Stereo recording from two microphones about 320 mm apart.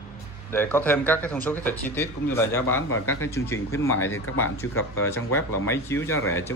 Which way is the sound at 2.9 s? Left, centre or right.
Left.